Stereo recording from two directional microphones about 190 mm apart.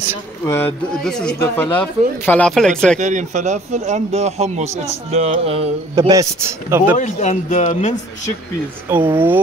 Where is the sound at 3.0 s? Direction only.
40° right (ahead or behind).